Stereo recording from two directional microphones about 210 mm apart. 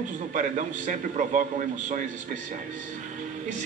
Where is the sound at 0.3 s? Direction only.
35° right (ahead or behind).